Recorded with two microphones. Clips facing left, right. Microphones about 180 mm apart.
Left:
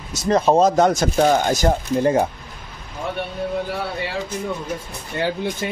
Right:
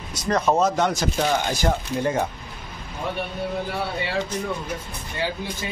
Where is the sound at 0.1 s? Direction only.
25° left (ahead or behind).